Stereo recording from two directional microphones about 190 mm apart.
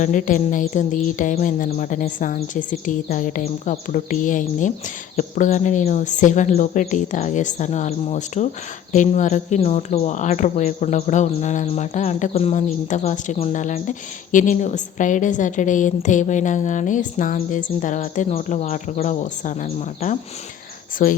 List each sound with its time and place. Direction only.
0.0 s a woman's voice: 40° left (ahead or behind)